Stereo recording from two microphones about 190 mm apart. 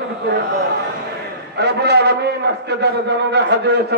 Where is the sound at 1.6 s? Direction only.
60° right (ahead or behind).